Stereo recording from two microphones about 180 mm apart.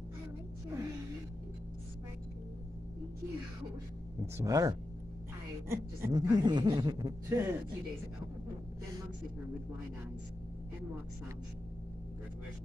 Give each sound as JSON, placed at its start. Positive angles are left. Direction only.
{"t": 4.4, "sound": "speech", "side_deg": -20}